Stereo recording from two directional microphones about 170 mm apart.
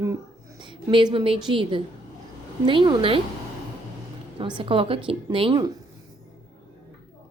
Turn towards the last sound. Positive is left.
turn(degrees=-25)  # may be behind; listen again after turning